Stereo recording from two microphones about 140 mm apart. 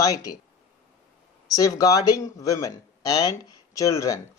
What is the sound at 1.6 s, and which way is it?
Speech, 25° left (ahead or behind).